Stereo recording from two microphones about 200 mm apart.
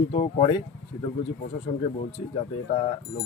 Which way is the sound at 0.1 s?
30° left (ahead or behind).